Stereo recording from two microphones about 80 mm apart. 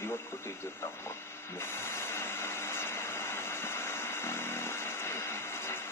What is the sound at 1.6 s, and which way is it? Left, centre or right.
Vehicle, left.